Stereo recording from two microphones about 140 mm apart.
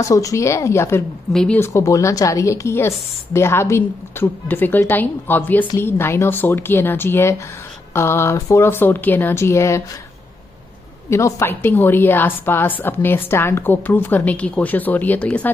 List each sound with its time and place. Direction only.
0.0 s speech: 25° left (ahead or behind)
1.3 s speech: 5° left (ahead or behind)
1.6 s a woman's voice: 20° left (ahead or behind)
11.1 s a woman's voice: 20° left (ahead or behind)